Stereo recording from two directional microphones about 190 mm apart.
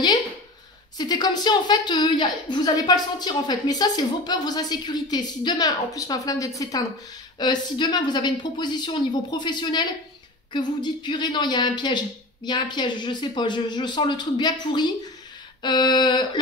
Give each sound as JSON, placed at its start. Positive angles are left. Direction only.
{"t": 0.9, "sound": "a woman's voice", "side_deg": 20}